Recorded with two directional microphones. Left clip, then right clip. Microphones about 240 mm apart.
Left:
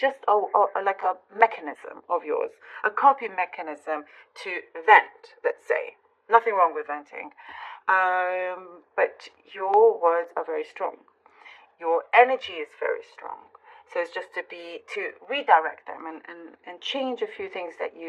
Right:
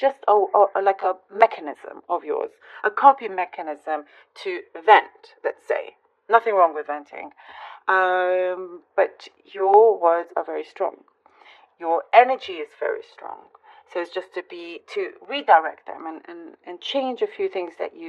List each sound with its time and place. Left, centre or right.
0.0 s speech: right